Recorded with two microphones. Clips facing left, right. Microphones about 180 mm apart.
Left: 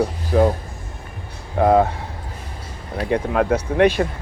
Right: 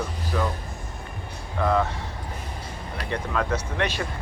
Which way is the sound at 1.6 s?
55° left (ahead or behind).